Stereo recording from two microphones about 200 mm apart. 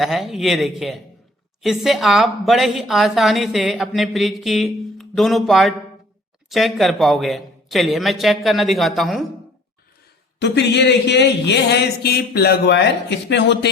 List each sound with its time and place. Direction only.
0.0 s a woman's voice: centre (ahead or behind)
10.4 s speech: 60° left (ahead or behind)